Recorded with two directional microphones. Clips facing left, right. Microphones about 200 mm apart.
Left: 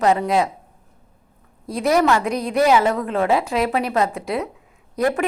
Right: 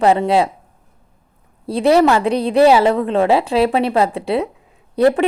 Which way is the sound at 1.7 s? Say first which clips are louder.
Right 5 dB; 30° right (ahead or behind).